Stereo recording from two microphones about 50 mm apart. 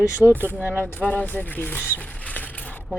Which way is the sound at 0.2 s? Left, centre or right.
Centre.